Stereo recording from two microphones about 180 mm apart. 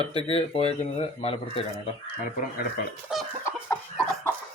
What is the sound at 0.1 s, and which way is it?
Speech, 30° left (ahead or behind).